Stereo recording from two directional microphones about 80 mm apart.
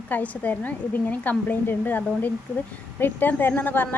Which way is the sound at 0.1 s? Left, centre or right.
Left.